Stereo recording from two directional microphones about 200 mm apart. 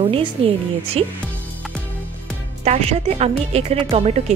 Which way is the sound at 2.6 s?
30° right (ahead or behind).